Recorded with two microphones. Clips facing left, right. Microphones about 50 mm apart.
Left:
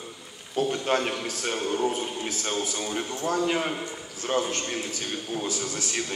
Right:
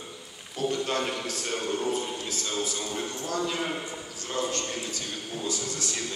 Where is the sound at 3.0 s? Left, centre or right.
Left.